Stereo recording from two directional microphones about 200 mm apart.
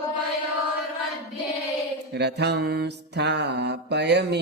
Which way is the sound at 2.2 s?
55° right (ahead or behind).